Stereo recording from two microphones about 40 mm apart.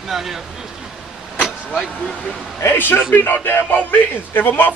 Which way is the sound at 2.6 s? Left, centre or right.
Left.